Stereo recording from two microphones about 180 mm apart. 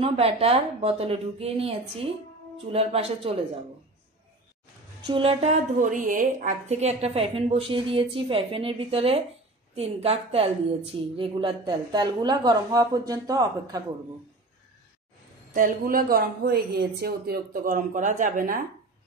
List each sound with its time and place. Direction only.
0.0 s a woman's voice: 35° right (ahead or behind)
5.0 s a woman's voice: 30° right (ahead or behind)
15.5 s speech: 50° right (ahead or behind)